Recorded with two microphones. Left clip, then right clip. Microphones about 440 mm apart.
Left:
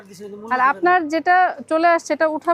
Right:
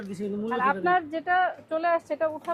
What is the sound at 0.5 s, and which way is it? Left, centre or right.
A woman's voice, left.